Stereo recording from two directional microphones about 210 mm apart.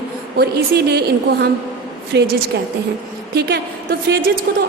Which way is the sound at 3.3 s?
50° right (ahead or behind).